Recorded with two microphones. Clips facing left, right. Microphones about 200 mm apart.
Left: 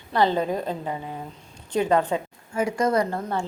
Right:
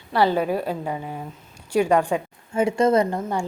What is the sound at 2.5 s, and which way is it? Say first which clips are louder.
Speech: right 4 dB; 25° right (ahead or behind).